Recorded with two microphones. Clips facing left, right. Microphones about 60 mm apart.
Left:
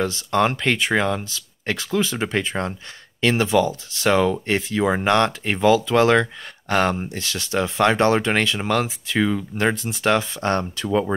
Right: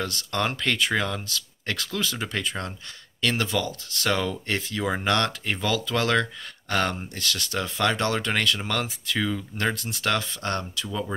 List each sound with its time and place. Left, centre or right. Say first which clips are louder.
0.0 s speech: left 7 dB; centre; by 11.1 s left